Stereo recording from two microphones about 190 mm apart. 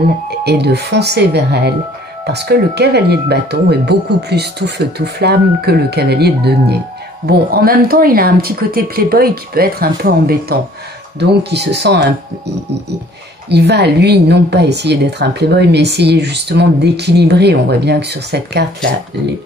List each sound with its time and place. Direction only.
0.4 s a woman's voice: 60° right (ahead or behind)
13.5 s a woman's voice: 60° right (ahead or behind)